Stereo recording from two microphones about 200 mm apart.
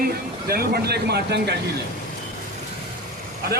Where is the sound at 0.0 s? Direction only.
50° right (ahead or behind).